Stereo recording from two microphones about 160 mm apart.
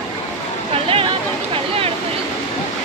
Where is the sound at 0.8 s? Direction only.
35° right (ahead or behind).